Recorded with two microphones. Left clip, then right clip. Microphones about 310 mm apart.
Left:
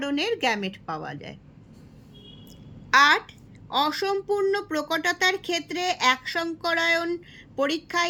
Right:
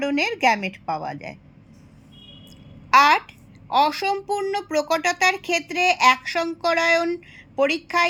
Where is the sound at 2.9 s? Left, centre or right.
Right.